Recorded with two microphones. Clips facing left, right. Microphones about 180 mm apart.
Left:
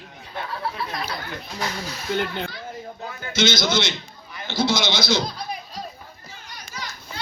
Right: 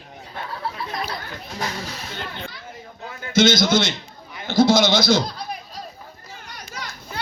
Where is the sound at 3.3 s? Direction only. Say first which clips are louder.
Right 5 dB; 55° right (ahead or behind).